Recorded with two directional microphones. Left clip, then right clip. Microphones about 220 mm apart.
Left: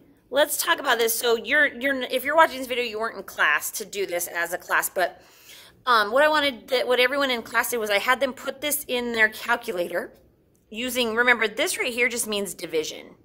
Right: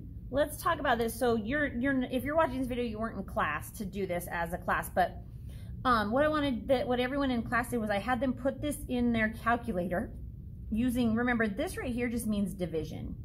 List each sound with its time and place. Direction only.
0.3 s a woman's voice: 45° left (ahead or behind)